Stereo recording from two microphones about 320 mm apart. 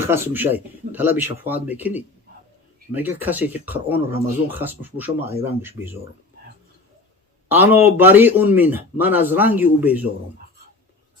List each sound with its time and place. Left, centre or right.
0.0 s speech: centre
7.4 s speech: centre